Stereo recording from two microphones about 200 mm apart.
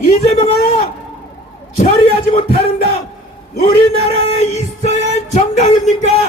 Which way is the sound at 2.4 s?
30° left (ahead or behind).